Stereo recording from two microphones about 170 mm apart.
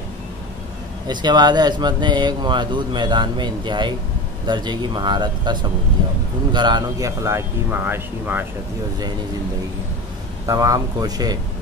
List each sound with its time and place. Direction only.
1.0 s speech: 25° right (ahead or behind)
10.4 s speech: 20° right (ahead or behind)